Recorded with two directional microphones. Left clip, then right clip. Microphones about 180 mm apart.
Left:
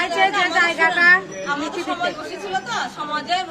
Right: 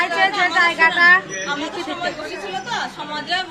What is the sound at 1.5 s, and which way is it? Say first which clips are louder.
Speech: left 1 dB; centre (ahead or behind).